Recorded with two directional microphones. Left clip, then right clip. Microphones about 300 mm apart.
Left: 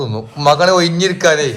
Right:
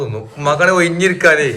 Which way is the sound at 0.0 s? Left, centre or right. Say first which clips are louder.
Left 4 dB; centre.